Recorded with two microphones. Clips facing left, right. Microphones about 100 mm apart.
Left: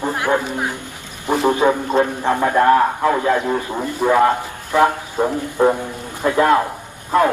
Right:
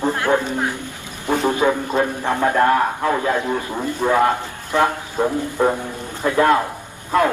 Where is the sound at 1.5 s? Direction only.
25° left (ahead or behind).